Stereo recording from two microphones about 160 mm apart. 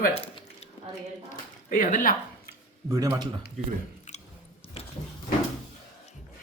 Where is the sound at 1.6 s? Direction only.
55° left (ahead or behind).